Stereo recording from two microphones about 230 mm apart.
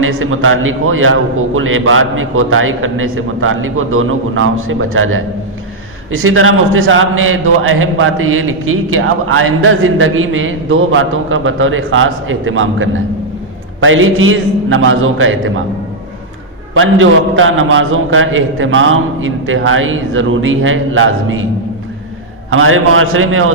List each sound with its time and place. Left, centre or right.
0.0 s a man's voice: right
16.7 s a man's voice: right
22.4 s a man's voice: right